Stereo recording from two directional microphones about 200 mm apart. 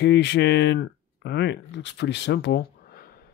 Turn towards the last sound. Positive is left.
turn(degrees=50)  # may be behind; listen again after turning